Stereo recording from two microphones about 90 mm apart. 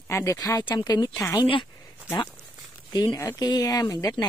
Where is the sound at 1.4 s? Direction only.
65° left (ahead or behind).